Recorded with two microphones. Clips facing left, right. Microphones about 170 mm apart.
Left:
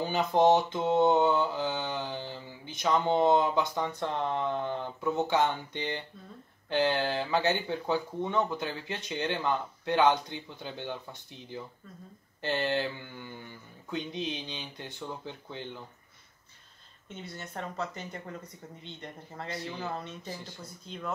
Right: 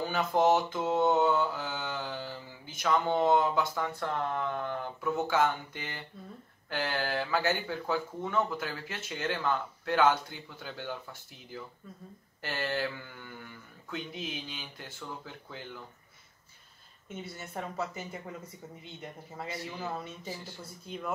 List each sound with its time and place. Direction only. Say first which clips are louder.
0.1 s mantra: left 3 dB; 20° left (ahead or behind)
17.1 s speech: right 1 dB; 5° right (ahead or behind)